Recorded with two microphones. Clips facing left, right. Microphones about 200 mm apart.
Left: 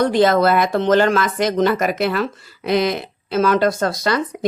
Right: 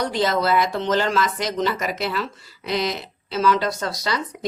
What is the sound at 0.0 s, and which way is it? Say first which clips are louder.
Speech: left 7 dB; 55° left (ahead or behind).